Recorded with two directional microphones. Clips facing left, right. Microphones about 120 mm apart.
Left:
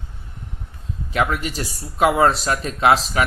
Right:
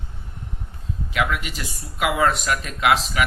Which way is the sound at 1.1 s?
40° left (ahead or behind).